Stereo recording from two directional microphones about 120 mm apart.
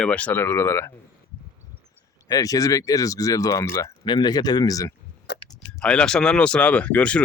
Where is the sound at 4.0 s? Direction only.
40° left (ahead or behind).